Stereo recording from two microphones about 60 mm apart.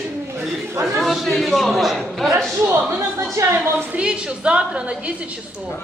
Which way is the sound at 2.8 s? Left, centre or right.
Right.